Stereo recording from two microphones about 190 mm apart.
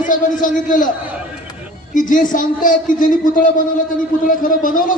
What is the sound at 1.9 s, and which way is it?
A man's voice, 45° left (ahead or behind).